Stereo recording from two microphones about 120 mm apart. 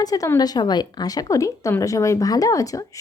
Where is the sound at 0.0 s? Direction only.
30° left (ahead or behind).